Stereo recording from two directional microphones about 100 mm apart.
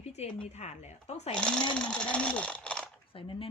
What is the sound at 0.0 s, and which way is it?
Speech, 90° left.